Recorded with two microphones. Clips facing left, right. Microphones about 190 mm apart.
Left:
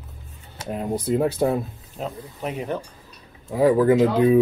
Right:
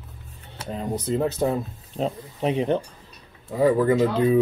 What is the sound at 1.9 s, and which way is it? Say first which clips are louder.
Speech: right 5 dB; 25° right (ahead or behind).